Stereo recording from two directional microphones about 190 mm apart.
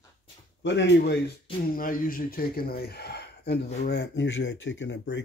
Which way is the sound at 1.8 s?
45° left (ahead or behind).